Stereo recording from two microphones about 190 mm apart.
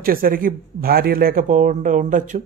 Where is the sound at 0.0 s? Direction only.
50° right (ahead or behind).